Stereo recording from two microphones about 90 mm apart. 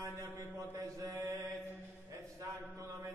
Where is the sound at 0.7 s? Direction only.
35° right (ahead or behind).